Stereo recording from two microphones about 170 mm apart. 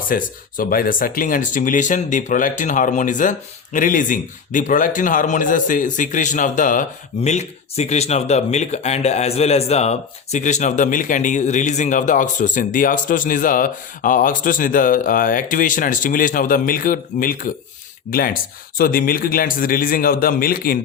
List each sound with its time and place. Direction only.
0.1 s a man's voice: 55° left (ahead or behind)